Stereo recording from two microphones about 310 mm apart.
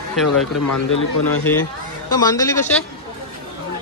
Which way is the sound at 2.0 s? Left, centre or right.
Centre.